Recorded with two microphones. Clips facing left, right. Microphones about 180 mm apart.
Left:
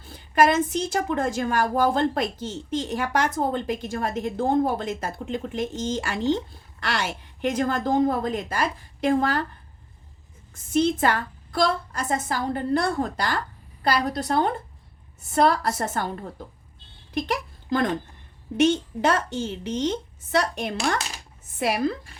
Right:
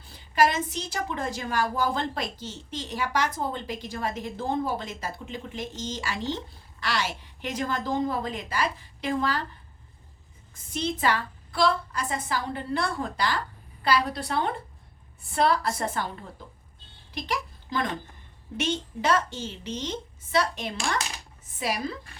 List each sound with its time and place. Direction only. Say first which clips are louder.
0.3 s a woman's voice: left 4 dB; 50° left (ahead or behind)
10.5 s a woman's voice: left 9 dB; 50° left (ahead or behind)